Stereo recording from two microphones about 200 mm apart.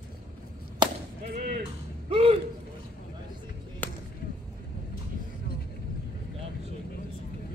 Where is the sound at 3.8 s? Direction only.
10° left (ahead or behind).